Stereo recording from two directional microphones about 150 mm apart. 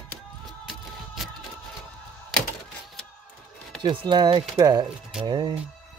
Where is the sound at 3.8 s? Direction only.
35° right (ahead or behind).